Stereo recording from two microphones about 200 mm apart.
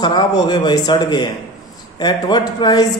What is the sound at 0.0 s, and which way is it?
A man's voice, 20° left (ahead or behind).